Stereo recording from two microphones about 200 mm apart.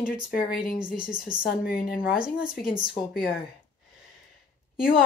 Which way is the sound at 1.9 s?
5° right (ahead or behind).